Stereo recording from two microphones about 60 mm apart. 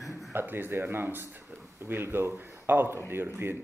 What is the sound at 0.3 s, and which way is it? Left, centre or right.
Speech, right.